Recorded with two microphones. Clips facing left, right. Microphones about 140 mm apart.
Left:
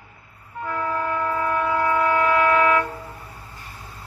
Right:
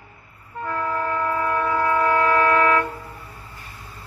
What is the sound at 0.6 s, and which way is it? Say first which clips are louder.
Train: even; 5° left (ahead or behind).